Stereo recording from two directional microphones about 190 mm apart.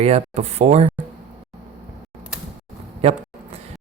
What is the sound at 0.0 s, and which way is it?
Speech, 35° right (ahead or behind).